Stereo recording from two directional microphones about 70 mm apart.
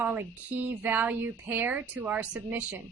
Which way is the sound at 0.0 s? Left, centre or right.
Right.